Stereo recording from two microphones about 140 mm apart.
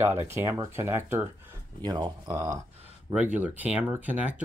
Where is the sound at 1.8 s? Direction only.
30° right (ahead or behind).